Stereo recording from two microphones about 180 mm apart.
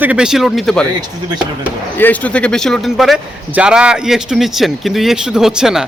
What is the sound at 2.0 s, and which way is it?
Speech, 10° left (ahead or behind).